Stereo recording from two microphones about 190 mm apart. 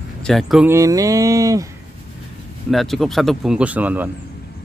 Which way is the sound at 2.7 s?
Centre (ahead or behind).